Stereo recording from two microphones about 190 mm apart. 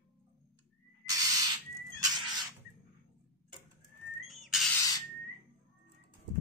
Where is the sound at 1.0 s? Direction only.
20° right (ahead or behind).